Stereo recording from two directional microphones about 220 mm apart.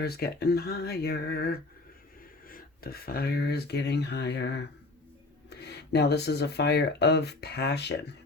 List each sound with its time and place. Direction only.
0.0 s speech: 45° left (ahead or behind)